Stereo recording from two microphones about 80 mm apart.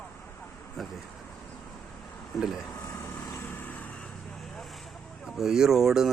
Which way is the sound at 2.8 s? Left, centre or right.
Left.